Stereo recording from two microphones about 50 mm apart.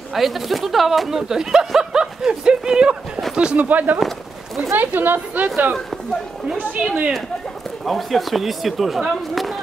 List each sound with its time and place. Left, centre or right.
0.1 s speech: centre
3.5 s a woman's voice: right
6.8 s speech: right
7.8 s speech: centre